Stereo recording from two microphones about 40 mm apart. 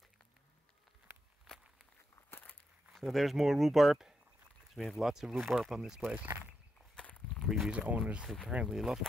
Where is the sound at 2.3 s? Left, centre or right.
Left.